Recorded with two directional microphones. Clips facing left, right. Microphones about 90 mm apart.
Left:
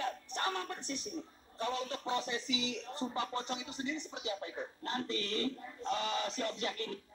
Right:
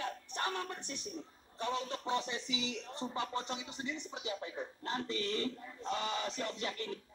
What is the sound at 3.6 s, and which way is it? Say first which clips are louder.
Speech: left 2 dB; 10° right (ahead or behind).